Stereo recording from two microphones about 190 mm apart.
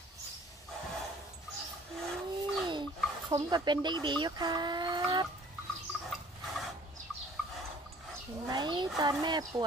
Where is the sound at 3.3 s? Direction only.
20° right (ahead or behind).